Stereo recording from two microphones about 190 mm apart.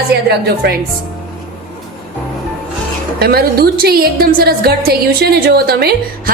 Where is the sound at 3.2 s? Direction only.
55° right (ahead or behind).